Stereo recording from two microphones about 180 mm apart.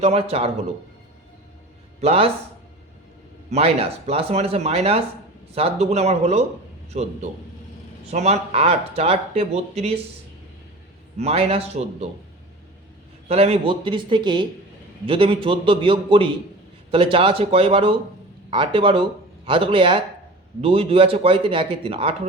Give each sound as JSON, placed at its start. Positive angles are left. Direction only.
{"t": 0.0, "sound": "speech", "side_deg": -35}
{"t": 2.0, "sound": "speech", "side_deg": -35}
{"t": 3.5, "sound": "speech", "side_deg": -35}
{"t": 11.2, "sound": "speech", "side_deg": -35}
{"t": 13.2, "sound": "a man's voice", "side_deg": -35}